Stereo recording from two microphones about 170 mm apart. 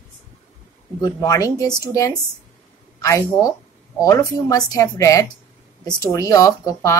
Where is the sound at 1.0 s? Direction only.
20° left (ahead or behind).